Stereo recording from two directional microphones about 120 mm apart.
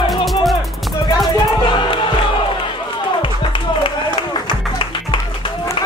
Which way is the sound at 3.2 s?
45° left (ahead or behind).